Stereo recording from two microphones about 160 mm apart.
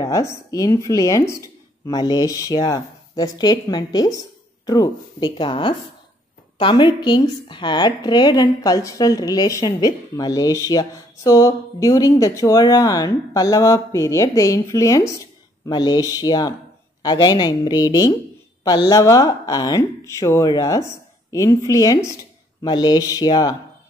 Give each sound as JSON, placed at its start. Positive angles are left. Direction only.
{"t": 0.0, "sound": "a woman's voice", "side_deg": 20}